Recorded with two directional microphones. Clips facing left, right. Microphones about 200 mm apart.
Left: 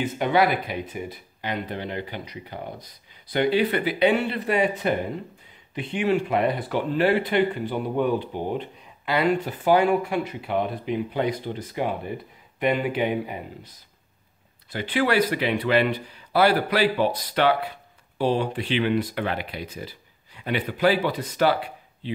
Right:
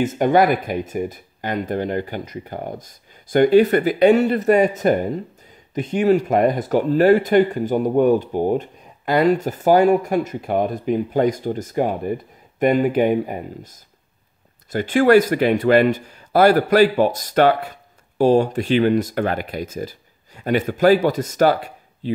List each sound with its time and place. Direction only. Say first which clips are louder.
0.0 s speech: right 5 dB; 45° right (ahead or behind)